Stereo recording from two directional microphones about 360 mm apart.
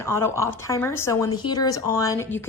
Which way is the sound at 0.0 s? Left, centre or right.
Centre.